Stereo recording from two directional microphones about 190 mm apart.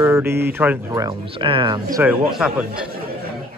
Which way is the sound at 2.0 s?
10° right (ahead or behind).